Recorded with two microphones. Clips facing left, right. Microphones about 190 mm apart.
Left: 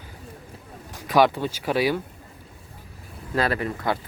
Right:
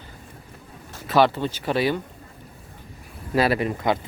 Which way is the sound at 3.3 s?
10° right (ahead or behind).